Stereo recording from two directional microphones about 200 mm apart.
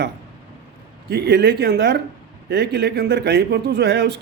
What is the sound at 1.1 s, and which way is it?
Speech, 55° right (ahead or behind).